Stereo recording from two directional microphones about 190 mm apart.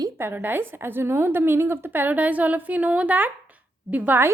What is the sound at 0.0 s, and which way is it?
A woman's voice, 10° right (ahead or behind).